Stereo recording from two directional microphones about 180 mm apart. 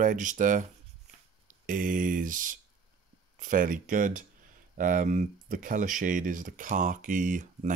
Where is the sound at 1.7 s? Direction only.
50° right (ahead or behind).